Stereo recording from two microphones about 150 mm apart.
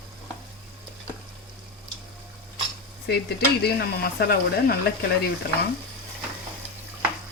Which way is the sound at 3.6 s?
90° left.